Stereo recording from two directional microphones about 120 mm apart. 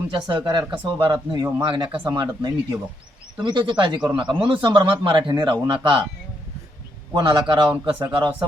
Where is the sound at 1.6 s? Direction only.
45° right (ahead or behind).